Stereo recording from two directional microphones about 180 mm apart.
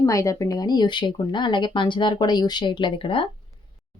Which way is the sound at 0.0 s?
15° left (ahead or behind).